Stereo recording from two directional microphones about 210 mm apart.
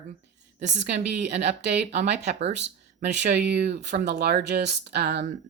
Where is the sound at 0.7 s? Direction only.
55° right (ahead or behind).